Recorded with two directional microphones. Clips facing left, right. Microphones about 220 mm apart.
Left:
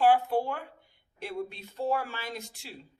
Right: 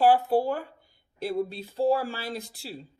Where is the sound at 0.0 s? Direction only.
35° right (ahead or behind).